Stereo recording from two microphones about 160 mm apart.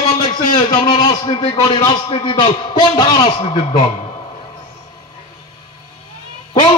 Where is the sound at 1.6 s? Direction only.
25° left (ahead or behind).